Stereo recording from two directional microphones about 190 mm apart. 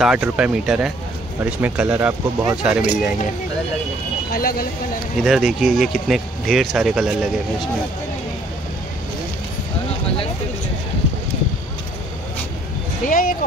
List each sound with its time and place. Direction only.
0.0 s speech: 5° right (ahead or behind)
4.3 s speech: 50° left (ahead or behind)
5.2 s speech: centre (ahead or behind)
13.1 s speech: 45° left (ahead or behind)